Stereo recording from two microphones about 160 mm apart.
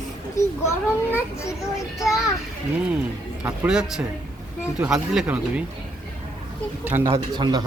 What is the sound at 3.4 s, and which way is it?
Speech, 5° right (ahead or behind).